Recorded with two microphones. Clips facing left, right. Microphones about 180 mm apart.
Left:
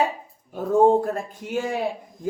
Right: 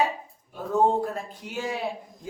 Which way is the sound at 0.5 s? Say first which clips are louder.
Left 6 dB; 50° left (ahead or behind).